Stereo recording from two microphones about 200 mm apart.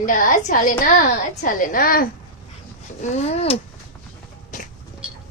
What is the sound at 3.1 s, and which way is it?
Speech, 30° left (ahead or behind).